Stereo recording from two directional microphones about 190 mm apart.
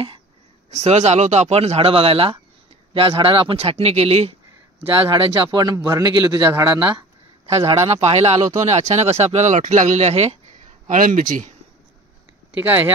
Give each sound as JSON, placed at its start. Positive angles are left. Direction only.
{"t": 0.7, "sound": "a man's voice", "side_deg": -35}
{"t": 5.1, "sound": "a man's voice", "side_deg": -20}
{"t": 7.5, "sound": "speech", "side_deg": -30}
{"t": 10.9, "sound": "speech", "side_deg": -45}
{"t": 12.5, "sound": "a man's voice", "side_deg": -10}